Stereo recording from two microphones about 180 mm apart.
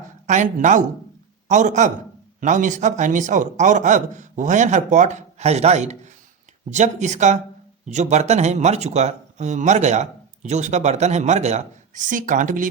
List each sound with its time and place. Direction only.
0.3 s a man's voice: 45° right (ahead or behind)